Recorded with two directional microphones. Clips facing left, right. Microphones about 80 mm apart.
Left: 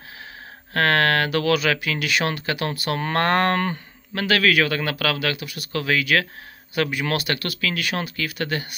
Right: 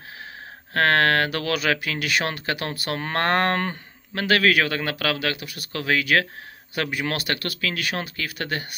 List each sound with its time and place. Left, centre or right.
0.7 s speech: right